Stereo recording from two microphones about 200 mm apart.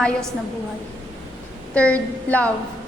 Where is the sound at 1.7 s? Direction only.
5° left (ahead or behind).